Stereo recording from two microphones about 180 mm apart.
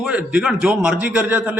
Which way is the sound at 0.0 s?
5° right (ahead or behind).